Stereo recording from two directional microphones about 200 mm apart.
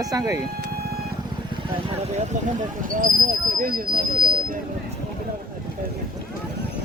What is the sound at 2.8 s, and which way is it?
Speech, 45° right (ahead or behind).